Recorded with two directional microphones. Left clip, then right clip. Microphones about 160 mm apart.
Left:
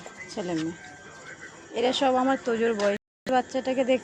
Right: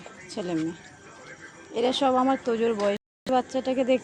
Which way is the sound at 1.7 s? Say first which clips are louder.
Even; 15° right (ahead or behind).